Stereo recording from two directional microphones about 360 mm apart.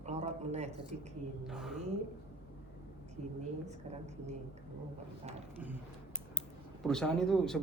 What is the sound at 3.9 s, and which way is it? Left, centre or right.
Speech, centre.